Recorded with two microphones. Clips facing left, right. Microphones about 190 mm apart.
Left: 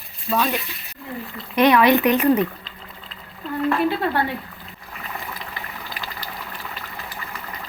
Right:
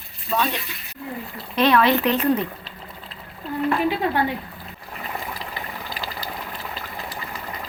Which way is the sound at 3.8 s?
15° right (ahead or behind).